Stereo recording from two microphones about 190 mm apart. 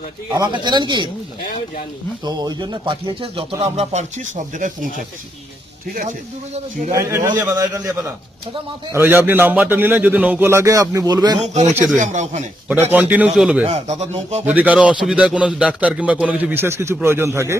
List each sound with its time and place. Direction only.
0.3 s speech: 20° right (ahead or behind)
2.2 s speech: 20° right (ahead or behind); by 4.9 s 45° right (ahead or behind)
5.9 s speech: 45° right (ahead or behind)
6.9 s a man's voice: 15° right (ahead or behind)
11.3 s speech: 35° right (ahead or behind)
11.7 s a man's voice: 10° right (ahead or behind)
11.9 s speech: 40° right (ahead or behind)
12.6 s a man's voice: 10° right (ahead or behind)
13.7 s speech: 35° right (ahead or behind)
14.4 s a man's voice: 10° right (ahead or behind)